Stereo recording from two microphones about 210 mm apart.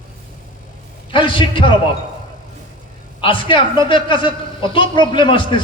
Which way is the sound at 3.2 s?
25° left (ahead or behind).